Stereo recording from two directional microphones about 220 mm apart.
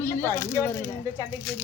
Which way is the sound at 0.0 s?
10° left (ahead or behind).